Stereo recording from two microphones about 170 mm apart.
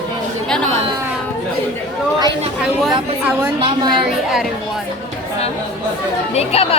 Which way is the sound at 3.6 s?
30° right (ahead or behind).